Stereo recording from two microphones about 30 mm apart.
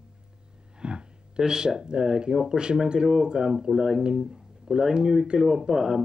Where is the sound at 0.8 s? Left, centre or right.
Right.